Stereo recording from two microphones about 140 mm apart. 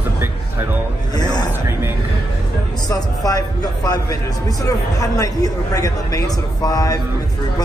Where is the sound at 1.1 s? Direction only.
30° left (ahead or behind).